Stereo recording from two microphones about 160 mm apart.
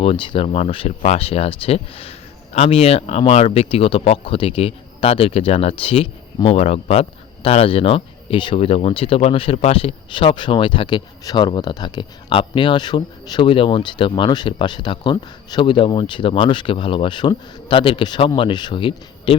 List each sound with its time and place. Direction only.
0.0 s speech: 30° left (ahead or behind)